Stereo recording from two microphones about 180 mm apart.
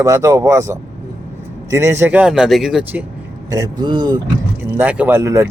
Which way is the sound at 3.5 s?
20° right (ahead or behind).